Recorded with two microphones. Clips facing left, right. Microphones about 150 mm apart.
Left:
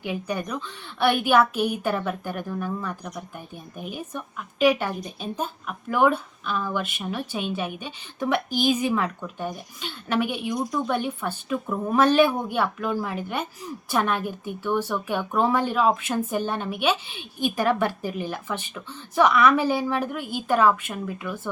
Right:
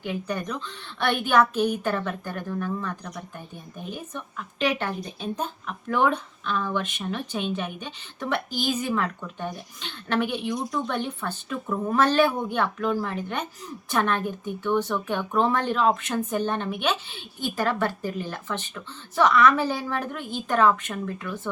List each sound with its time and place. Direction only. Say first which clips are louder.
0.0 s speech: left 1 dB; 15° left (ahead or behind)